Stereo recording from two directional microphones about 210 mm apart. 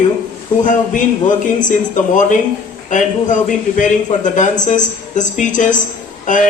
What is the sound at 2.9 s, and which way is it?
A man's voice, 35° left (ahead or behind).